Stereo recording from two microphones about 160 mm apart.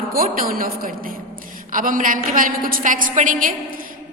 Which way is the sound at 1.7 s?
60° right (ahead or behind).